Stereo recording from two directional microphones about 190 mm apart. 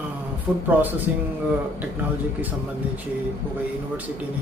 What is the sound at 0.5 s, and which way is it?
Speech, 10° right (ahead or behind).